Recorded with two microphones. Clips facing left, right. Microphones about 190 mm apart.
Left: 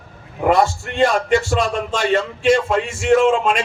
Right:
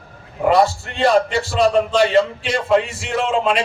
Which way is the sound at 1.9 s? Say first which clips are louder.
Right 4 dB; 45° left (ahead or behind).